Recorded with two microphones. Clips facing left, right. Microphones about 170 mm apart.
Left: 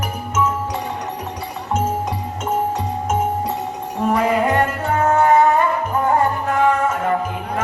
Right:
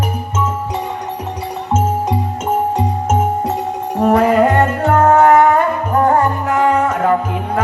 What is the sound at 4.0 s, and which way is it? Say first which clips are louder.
Music: right 6 dB; 45° right (ahead or behind).